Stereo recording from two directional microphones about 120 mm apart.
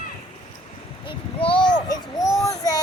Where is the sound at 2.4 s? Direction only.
30° left (ahead or behind).